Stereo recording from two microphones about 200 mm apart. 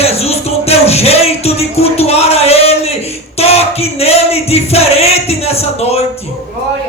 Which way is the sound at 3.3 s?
30° left (ahead or behind).